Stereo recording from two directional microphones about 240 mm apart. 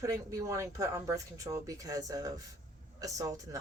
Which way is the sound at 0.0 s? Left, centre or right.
Centre.